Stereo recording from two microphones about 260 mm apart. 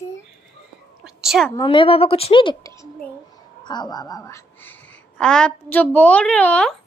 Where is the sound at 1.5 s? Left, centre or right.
Centre.